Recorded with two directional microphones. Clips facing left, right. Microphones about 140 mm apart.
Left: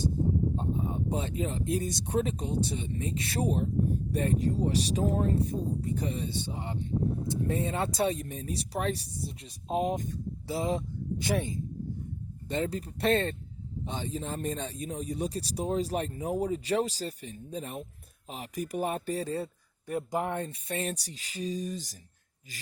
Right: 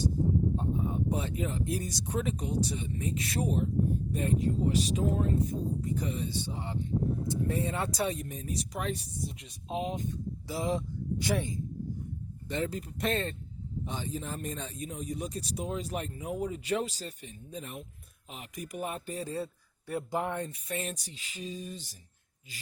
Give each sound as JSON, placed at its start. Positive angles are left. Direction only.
{"t": 0.5, "sound": "speech", "side_deg": 25}
{"t": 6.4, "sound": "speech", "side_deg": 15}
{"t": 10.4, "sound": "speech", "side_deg": 25}
{"t": 19.9, "sound": "speech", "side_deg": 15}